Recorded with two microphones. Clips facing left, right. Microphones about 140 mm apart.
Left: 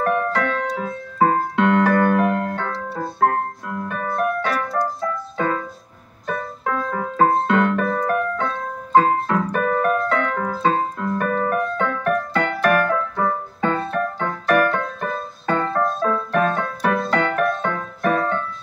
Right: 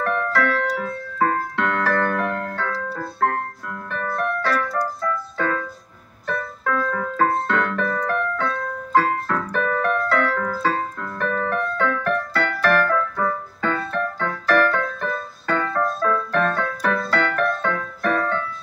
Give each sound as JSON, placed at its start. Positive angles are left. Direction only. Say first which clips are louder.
{"t": 0.0, "sound": "keyboard", "louder": "left 1 dB", "side_deg": 15}
{"t": 5.4, "sound": "music", "louder": "left 3 dB", "side_deg": 20}
{"t": 11.1, "sound": "keyboard", "louder": "left 2 dB", "side_deg": 10}
{"t": 13.9, "sound": "music", "louder": "left 2 dB", "side_deg": 15}